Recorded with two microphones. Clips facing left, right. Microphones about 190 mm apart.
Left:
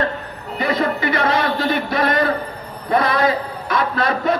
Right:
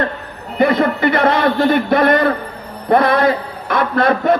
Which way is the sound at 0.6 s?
55° right (ahead or behind).